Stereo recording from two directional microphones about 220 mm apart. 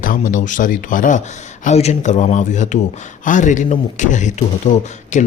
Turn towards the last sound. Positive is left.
turn(degrees=35)  # may be behind; listen again after turning